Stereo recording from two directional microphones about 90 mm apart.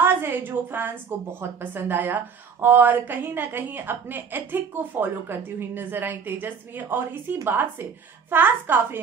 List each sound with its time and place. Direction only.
0.0 s a woman's voice: 25° right (ahead or behind)